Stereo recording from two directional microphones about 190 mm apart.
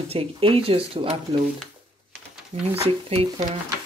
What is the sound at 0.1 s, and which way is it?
Speech, 30° right (ahead or behind).